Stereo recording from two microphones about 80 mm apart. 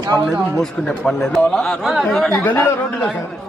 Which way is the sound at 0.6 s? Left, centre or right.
Centre.